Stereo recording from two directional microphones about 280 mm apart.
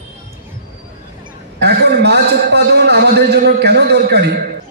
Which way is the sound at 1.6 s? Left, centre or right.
Right.